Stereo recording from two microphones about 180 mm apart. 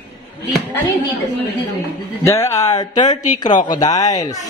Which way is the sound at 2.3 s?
15° left (ahead or behind).